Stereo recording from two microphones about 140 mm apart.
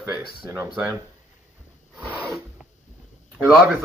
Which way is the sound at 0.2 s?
90° left.